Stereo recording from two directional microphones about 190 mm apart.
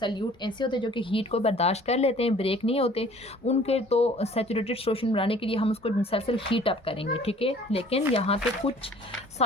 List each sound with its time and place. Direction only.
0.0 s speech: 25° left (ahead or behind)